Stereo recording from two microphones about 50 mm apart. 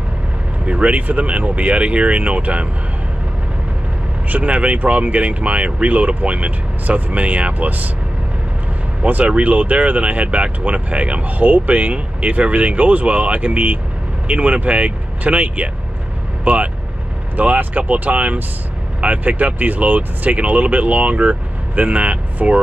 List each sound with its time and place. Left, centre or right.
0.7 s speech: right
4.3 s speech: right
9.0 s speech: right